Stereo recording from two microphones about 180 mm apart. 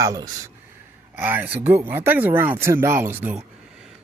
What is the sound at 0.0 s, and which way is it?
Speech, 20° right (ahead or behind).